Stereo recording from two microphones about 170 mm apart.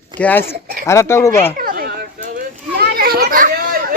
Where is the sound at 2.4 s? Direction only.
60° right (ahead or behind).